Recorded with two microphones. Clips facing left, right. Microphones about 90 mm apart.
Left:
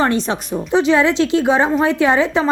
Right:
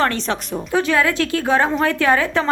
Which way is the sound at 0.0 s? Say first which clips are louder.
Left 2 dB; 15° left (ahead or behind).